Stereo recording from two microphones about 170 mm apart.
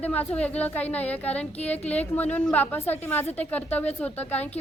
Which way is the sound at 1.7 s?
40° left (ahead or behind).